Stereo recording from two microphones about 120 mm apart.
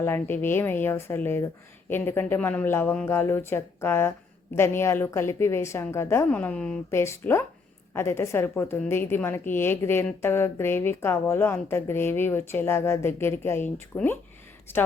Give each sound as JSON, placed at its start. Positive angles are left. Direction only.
{"t": 0.0, "sound": "a woman's voice", "side_deg": 20}
{"t": 6.9, "sound": "a woman's voice", "side_deg": 20}